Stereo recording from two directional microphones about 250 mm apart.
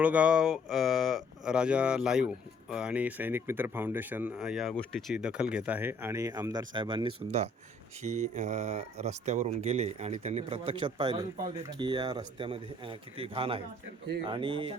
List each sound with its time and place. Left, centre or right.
0.0 s speech: centre